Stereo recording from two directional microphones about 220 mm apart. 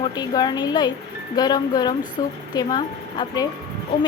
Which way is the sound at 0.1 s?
15° left (ahead or behind).